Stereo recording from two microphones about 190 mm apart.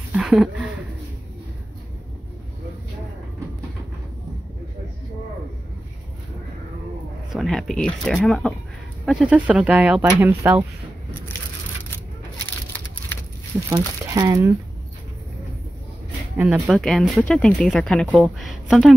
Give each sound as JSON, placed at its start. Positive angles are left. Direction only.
{"t": 0.1, "sound": "a sound", "side_deg": -5}
{"t": 7.3, "sound": "speech", "side_deg": 0}
{"t": 14.1, "sound": "speech", "side_deg": -20}
{"t": 16.3, "sound": "speech", "side_deg": -5}